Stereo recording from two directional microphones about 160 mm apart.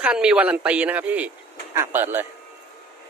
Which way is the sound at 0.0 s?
5° right (ahead or behind).